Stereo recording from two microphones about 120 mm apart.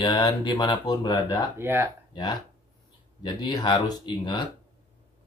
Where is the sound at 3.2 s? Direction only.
35° left (ahead or behind).